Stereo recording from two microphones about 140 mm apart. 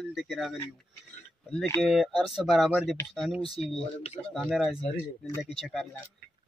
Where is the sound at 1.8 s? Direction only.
Centre (ahead or behind).